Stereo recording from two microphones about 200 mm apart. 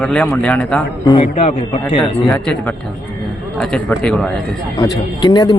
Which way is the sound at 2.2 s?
5° left (ahead or behind).